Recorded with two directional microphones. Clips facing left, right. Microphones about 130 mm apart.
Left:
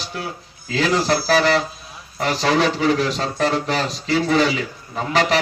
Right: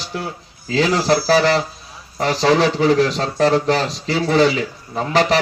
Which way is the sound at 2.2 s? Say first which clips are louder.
Right 3 dB; 35° right (ahead or behind).